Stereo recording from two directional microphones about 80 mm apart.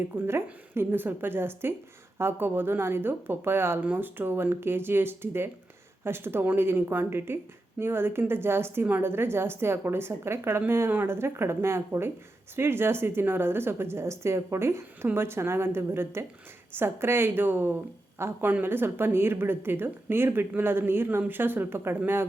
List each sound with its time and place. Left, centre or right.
0.3 s a woman's voice: right